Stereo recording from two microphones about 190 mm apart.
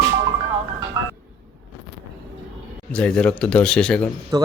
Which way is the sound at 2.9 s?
5° left (ahead or behind).